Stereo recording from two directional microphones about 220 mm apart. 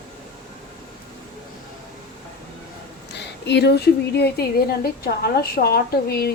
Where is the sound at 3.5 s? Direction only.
50° left (ahead or behind).